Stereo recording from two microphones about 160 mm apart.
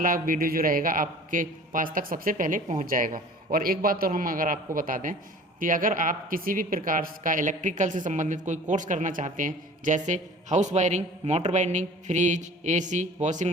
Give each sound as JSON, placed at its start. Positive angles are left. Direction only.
{"t": 0.0, "sound": "a man's voice", "side_deg": -60}